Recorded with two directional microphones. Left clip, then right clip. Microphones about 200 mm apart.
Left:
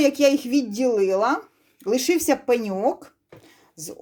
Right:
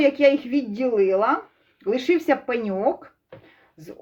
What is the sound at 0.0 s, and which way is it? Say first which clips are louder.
A woman's voice: right 1 dB; 35° left (ahead or behind).